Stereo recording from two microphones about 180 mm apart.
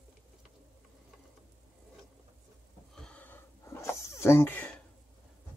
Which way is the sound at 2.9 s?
5° left (ahead or behind).